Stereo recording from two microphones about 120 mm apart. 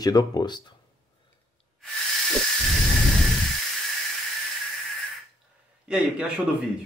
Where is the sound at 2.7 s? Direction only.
Centre (ahead or behind).